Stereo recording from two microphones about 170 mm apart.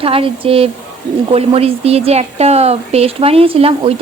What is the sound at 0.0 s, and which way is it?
Speech, 35° right (ahead or behind).